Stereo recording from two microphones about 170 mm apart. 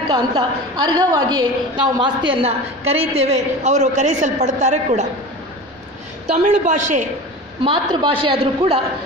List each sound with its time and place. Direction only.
0.1 s a woman's voice: 25° right (ahead or behind); by 5.0 s 45° right (ahead or behind)
6.3 s a woman's voice: 45° right (ahead or behind)
7.6 s a woman's voice: 30° right (ahead or behind)